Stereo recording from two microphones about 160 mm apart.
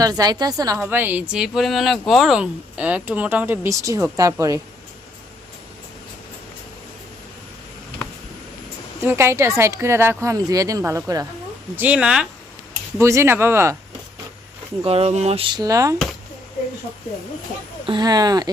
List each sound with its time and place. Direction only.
0.0 s a woman's voice: 25° right (ahead or behind)
9.0 s a woman's voice: 15° right (ahead or behind)
11.8 s speech: 5° right (ahead or behind)
13.0 s a woman's voice: 15° right (ahead or behind)
14.8 s speech: 40° right (ahead or behind); by 16.0 s 20° right (ahead or behind)
17.8 s speech: 25° right (ahead or behind)